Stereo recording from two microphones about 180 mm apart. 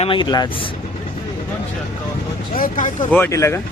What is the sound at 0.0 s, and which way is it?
Speech, 25° left (ahead or behind).